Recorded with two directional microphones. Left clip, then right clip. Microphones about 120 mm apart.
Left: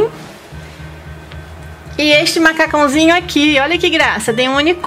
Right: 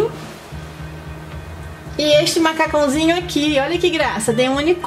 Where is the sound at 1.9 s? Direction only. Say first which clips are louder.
Left 3 dB; 35° left (ahead or behind).